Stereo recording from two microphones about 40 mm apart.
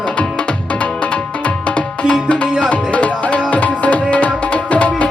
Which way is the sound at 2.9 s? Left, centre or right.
Left.